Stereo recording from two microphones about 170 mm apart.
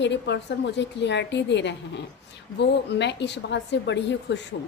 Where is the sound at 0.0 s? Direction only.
90° left.